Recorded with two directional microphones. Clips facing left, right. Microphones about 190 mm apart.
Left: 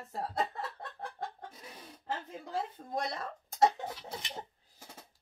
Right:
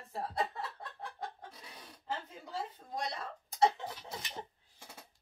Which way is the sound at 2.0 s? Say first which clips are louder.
Left 2 dB; 55° left (ahead or behind).